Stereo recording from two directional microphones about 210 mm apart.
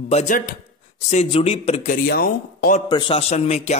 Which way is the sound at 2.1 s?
45° left (ahead or behind).